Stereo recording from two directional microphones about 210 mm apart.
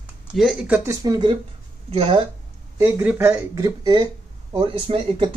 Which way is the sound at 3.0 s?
10° right (ahead or behind).